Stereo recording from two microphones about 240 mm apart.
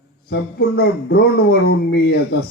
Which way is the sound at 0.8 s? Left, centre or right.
Left.